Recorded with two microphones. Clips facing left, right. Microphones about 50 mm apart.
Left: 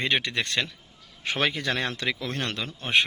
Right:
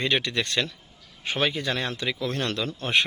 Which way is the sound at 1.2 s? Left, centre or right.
Left.